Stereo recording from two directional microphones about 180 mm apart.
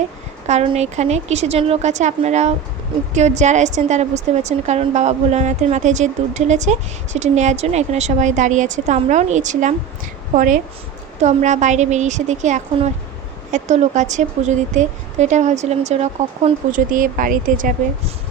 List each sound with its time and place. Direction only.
0.4 s a woman's voice: 35° right (ahead or behind)
16.7 s speech: 50° right (ahead or behind)